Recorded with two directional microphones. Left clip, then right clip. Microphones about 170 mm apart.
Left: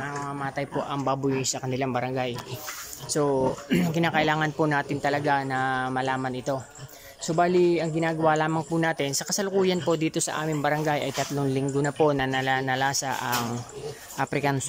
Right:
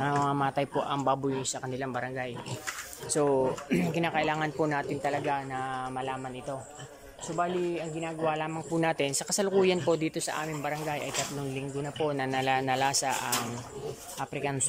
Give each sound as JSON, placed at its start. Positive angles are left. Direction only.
{"t": 0.0, "sound": "a sound", "side_deg": -20}
{"t": 0.7, "sound": "speech", "side_deg": 0}
{"t": 3.1, "sound": "speech", "side_deg": 5}
{"t": 8.7, "sound": "speech", "side_deg": 5}
{"t": 12.2, "sound": "speech", "side_deg": 5}